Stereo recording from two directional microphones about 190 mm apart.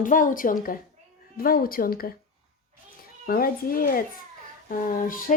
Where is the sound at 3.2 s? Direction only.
50° left (ahead or behind).